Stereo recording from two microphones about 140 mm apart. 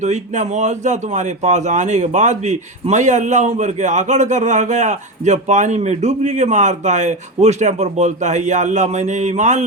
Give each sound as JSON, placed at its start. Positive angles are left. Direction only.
{"t": 0.0, "sound": "a man's voice", "side_deg": -60}